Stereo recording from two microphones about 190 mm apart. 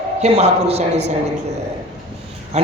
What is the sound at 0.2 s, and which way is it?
Speech, 35° right (ahead or behind).